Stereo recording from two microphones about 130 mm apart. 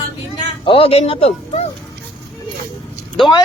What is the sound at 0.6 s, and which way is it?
Speech, 45° left (ahead or behind).